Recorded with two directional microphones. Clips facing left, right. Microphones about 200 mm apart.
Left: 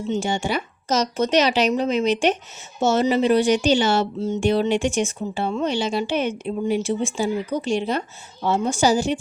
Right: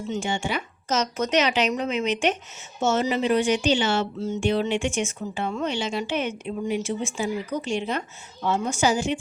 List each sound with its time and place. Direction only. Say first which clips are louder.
0.1 s speech: left 4 dB; 35° left (ahead or behind)